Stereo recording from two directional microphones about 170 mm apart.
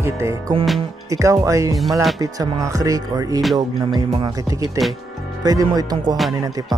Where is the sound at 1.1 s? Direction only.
20° right (ahead or behind).